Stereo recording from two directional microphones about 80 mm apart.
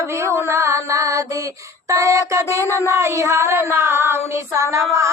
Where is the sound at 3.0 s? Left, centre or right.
Right.